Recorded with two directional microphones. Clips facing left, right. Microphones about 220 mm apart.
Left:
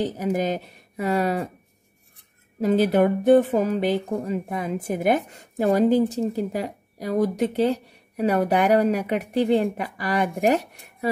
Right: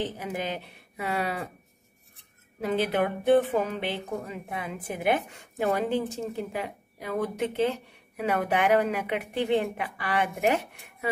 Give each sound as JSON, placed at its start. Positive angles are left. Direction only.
{"t": 0.0, "sound": "a woman's voice", "side_deg": 40}
{"t": 2.6, "sound": "a woman's voice", "side_deg": 40}